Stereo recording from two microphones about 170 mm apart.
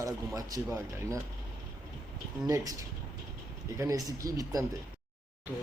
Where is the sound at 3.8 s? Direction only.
20° right (ahead or behind).